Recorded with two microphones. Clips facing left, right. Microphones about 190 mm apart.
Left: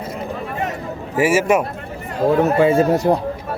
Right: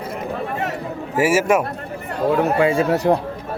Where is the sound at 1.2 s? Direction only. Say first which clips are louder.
Left 1 dB; 5° right (ahead or behind).